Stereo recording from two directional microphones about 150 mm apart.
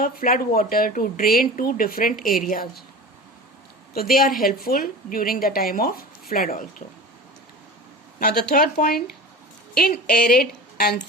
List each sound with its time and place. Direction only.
0.0 s a woman's voice: 70° left (ahead or behind)
3.9 s a woman's voice: 80° left
8.2 s speech: 90° left